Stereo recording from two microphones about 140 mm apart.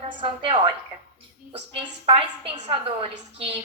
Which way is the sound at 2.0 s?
40° right (ahead or behind).